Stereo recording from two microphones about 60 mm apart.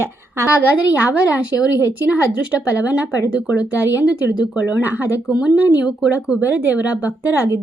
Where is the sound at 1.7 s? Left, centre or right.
Left.